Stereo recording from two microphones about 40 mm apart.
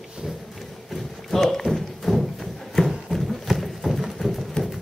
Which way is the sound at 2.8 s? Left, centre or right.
Centre.